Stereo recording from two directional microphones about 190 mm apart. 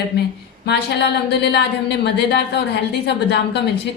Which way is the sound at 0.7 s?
65° left (ahead or behind).